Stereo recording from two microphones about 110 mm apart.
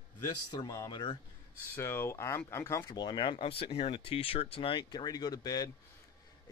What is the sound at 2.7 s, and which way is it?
Speech, 40° left (ahead or behind).